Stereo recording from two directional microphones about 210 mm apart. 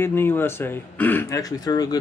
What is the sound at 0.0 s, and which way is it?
Speech, 10° left (ahead or behind).